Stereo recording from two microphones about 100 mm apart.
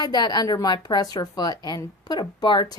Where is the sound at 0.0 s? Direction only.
45° left (ahead or behind).